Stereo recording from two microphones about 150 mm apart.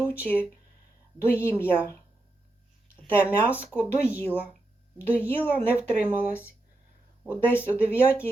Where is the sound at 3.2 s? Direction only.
10° right (ahead or behind).